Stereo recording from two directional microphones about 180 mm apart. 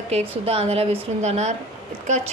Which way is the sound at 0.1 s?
35° right (ahead or behind).